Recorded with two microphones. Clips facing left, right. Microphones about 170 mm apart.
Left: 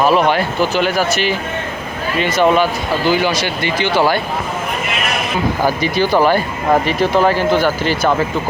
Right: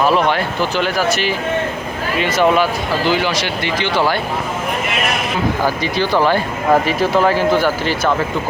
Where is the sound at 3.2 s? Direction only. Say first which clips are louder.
Left 2 dB; 50° left (ahead or behind).